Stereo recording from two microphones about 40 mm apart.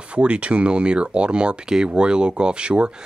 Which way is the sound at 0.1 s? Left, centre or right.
Right.